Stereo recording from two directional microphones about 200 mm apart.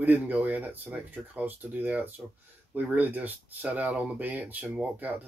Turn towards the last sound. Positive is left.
turn(degrees=-10)  # may be behind; listen again after turning